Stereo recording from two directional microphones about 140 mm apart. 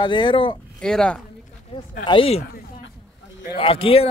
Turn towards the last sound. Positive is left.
turn(degrees=40)  # may be behind; listen again after turning